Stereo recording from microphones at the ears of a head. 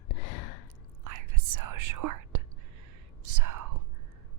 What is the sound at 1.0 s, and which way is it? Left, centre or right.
Whispering, right.